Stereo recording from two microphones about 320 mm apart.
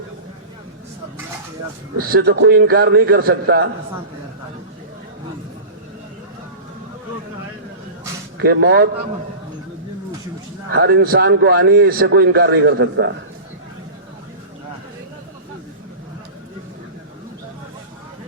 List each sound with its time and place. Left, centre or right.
2.0 s a man's voice: right
8.4 s a man's voice: right
10.7 s a man's voice: right